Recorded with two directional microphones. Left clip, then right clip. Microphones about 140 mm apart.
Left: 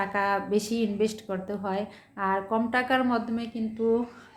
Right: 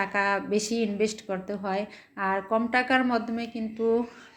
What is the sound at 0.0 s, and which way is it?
A woman's voice, 15° right (ahead or behind).